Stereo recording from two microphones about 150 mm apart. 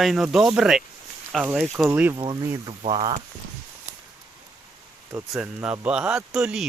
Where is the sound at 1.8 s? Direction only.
15° right (ahead or behind).